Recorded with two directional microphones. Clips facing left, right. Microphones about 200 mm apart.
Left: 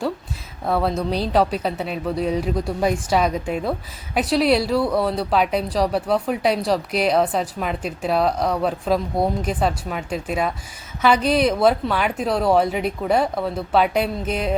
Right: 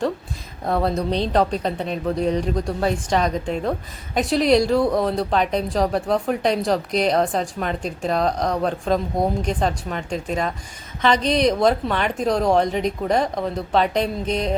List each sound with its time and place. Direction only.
0.6 s speech: centre (ahead or behind)
4.8 s speech: 20° right (ahead or behind)
5.0 s speech: 5° left (ahead or behind)